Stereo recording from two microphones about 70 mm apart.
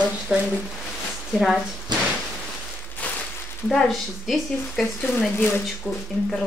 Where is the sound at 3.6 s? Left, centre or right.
Centre.